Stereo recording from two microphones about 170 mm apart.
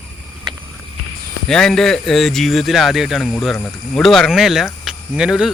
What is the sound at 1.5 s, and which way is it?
Speech, 5° left (ahead or behind).